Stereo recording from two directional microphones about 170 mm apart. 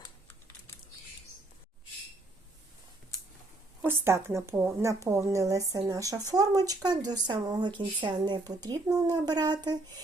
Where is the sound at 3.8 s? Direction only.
15° right (ahead or behind).